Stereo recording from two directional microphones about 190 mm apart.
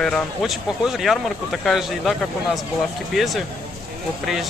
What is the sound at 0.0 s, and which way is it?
Speech, centre (ahead or behind).